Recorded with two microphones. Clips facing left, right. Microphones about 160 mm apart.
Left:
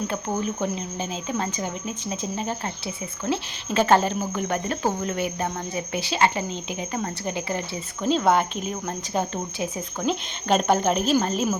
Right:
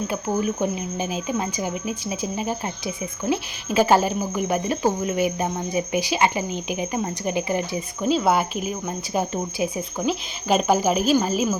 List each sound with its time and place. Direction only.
0.6 s speech: 15° right (ahead or behind)